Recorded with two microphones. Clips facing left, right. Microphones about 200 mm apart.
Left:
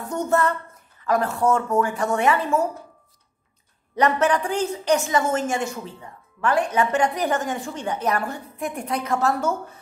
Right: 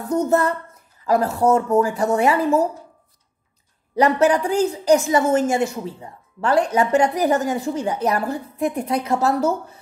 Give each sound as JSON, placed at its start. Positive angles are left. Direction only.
{"t": 0.1, "sound": "speech", "side_deg": -35}
{"t": 3.9, "sound": "speech", "side_deg": -35}